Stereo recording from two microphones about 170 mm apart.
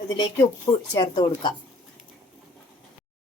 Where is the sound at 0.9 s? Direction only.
25° left (ahead or behind).